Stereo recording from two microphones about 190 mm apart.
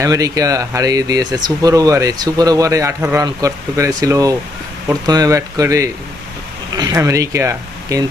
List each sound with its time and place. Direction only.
0.0 s speech: 15° right (ahead or behind)